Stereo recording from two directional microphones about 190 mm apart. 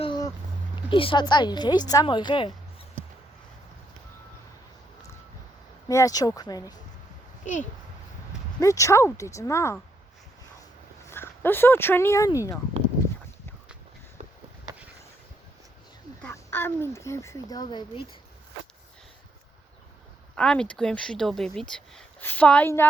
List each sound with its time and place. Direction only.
0.0 s a sound: 25° left (ahead or behind)
0.9 s a woman's voice: 25° left (ahead or behind)
5.9 s a woman's voice: 15° left (ahead or behind)
7.4 s a child's voice: 40° left (ahead or behind)
8.6 s speech: 15° left (ahead or behind)
11.1 s speech: 10° left (ahead or behind)
16.2 s a child's voice: 10° left (ahead or behind)
20.3 s speech: 5° left (ahead or behind)